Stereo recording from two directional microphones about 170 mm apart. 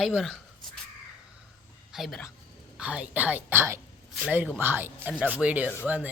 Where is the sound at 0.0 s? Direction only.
Centre (ahead or behind).